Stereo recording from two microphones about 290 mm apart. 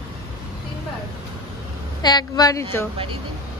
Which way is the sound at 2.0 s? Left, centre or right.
Centre.